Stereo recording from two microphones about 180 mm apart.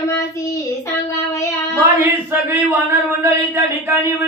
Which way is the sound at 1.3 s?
15° left (ahead or behind).